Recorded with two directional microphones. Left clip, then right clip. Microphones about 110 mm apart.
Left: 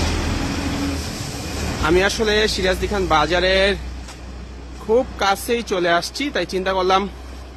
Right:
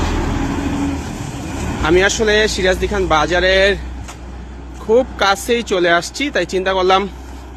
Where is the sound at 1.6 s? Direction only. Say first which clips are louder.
Right 4 dB; 25° left (ahead or behind).